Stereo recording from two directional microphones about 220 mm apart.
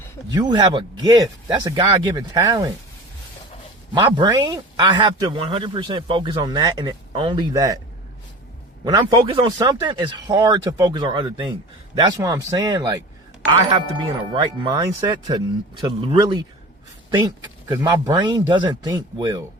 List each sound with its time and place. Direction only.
0.3 s speech: 20° right (ahead or behind)
4.1 s a man's voice: 20° right (ahead or behind)
8.8 s a man's voice: 20° right (ahead or behind)
17.7 s a man's voice: 20° right (ahead or behind)